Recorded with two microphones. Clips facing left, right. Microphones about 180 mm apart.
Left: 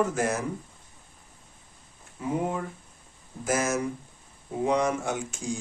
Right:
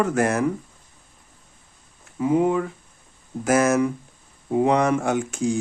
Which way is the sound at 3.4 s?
60° right (ahead or behind).